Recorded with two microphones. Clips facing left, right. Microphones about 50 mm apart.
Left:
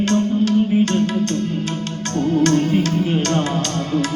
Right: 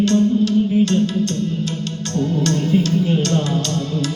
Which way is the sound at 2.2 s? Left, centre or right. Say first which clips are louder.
Left 4 dB; left.